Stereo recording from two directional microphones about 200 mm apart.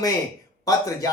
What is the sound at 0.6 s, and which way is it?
Speech, 20° left (ahead or behind).